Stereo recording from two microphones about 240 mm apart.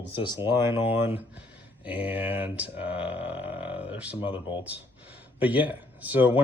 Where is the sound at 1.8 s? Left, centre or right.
Centre.